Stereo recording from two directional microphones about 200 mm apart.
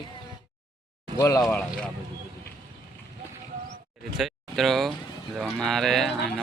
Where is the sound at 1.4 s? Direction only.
5° left (ahead or behind).